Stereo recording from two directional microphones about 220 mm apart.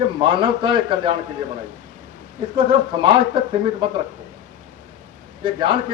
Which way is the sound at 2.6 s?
20° right (ahead or behind).